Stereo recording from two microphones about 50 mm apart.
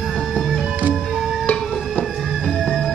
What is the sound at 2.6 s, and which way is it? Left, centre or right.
Music, centre.